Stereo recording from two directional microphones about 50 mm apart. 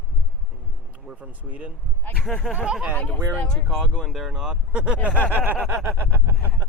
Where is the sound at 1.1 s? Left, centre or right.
Right.